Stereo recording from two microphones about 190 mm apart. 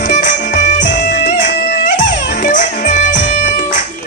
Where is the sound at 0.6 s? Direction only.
40° left (ahead or behind).